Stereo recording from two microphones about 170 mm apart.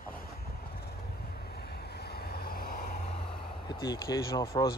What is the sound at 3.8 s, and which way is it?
Speech, 20° left (ahead or behind).